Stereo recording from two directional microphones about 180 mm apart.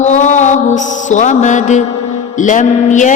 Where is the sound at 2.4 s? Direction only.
45° left (ahead or behind).